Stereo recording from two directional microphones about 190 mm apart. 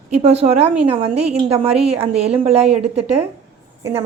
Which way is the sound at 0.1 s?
35° right (ahead or behind).